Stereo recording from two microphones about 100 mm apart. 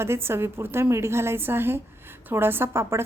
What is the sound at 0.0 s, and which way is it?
A woman's voice, 25° right (ahead or behind).